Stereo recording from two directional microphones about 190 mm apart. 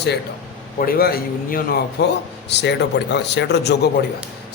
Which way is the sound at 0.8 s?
50° left (ahead or behind).